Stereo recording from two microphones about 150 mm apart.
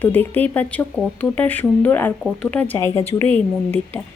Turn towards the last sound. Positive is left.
turn(degrees=15)  # may be behind; listen again after turning